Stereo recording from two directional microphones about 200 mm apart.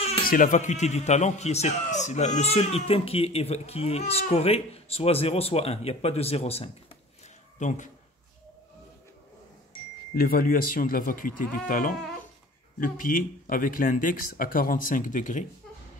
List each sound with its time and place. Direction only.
0.2 s a man's voice: 45° left (ahead or behind)
10.1 s speech: 45° left (ahead or behind)